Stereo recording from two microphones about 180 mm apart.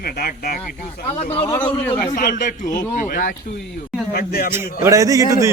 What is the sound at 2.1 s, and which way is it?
Speech, 45° left (ahead or behind).